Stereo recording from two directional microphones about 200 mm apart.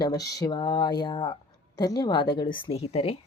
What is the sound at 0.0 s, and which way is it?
A child's voice, 20° left (ahead or behind).